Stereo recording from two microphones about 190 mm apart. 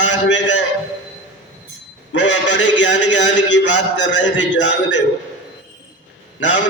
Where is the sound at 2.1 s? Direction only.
70° left (ahead or behind).